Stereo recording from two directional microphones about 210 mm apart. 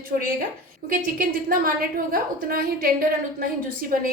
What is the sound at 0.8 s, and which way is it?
A woman's voice, 40° right (ahead or behind).